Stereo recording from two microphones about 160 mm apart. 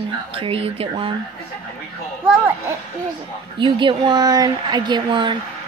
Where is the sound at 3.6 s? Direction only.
30° right (ahead or behind).